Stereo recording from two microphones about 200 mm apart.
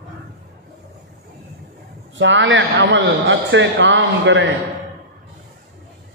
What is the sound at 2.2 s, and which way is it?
A man's voice, 65° right (ahead or behind).